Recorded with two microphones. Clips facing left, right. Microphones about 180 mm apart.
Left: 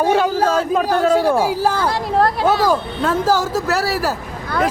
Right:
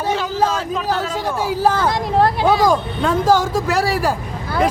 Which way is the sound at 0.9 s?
10° left (ahead or behind).